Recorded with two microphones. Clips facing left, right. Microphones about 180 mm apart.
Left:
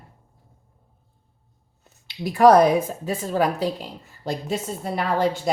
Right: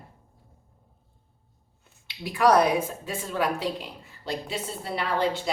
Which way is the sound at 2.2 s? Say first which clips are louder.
Left 6 dB; 40° left (ahead or behind).